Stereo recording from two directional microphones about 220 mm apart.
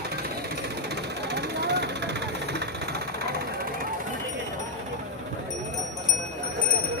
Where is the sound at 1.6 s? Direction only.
50° right (ahead or behind).